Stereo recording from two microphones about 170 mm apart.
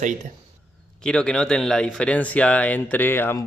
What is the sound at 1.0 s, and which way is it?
Speech, 5° left (ahead or behind).